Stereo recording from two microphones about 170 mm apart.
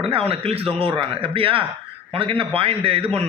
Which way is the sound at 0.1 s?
35° right (ahead or behind).